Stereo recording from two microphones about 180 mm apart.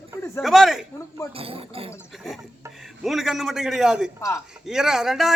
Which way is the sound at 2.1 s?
Centre (ahead or behind).